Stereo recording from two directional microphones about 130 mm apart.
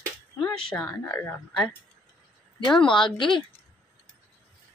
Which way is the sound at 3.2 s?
40° left (ahead or behind).